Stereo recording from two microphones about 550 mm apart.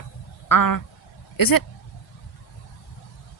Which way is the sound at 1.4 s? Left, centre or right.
Left.